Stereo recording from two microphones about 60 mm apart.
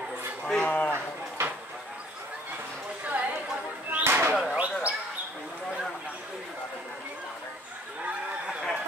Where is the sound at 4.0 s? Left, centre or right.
Right.